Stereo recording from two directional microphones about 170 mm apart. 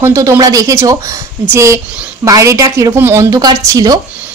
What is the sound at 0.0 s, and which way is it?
A woman's voice, 15° right (ahead or behind).